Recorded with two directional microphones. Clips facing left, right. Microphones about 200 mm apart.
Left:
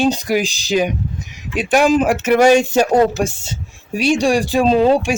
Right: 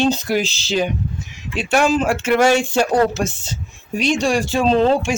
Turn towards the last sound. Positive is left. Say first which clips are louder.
# left 2 dB
turn(degrees=15)  # may be behind; listen again after turning